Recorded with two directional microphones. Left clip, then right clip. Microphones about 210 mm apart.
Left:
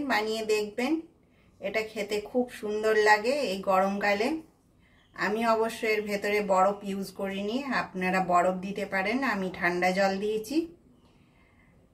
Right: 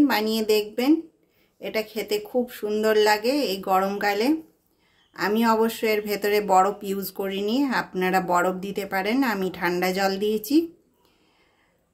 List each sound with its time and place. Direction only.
0.0 s speech: 55° right (ahead or behind)